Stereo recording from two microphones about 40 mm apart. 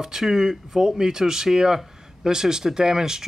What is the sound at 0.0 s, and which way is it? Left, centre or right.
Speech, centre.